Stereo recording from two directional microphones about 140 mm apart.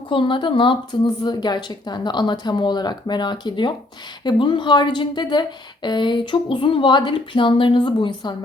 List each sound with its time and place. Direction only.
0.1 s speech: 35° left (ahead or behind)